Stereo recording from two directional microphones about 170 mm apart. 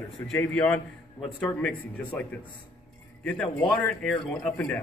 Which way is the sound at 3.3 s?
5° left (ahead or behind).